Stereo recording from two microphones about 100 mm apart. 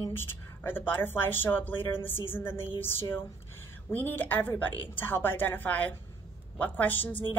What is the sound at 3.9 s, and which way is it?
A woman's voice, 20° left (ahead or behind).